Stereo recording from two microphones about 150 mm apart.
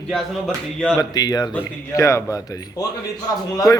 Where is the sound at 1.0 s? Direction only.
25° left (ahead or behind).